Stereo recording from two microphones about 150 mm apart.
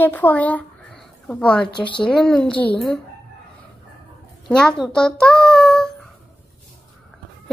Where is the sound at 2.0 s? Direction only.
5° left (ahead or behind).